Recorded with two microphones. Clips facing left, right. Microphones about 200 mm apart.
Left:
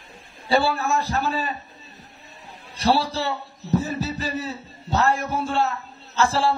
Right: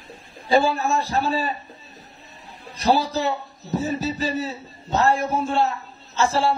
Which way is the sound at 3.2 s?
15° right (ahead or behind).